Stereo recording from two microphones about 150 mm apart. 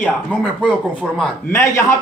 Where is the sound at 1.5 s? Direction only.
15° left (ahead or behind).